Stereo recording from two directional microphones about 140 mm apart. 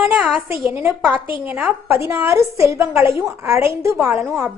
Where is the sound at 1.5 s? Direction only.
10° right (ahead or behind).